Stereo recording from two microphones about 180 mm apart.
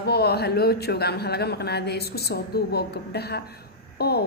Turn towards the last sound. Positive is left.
turn(degrees=65)  # may be behind; listen again after turning